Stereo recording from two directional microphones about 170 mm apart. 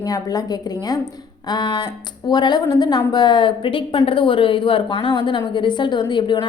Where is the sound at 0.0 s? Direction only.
20° left (ahead or behind).